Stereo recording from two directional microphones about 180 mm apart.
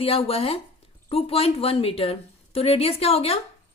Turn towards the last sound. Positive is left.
turn(degrees=35)  # may be behind; listen again after turning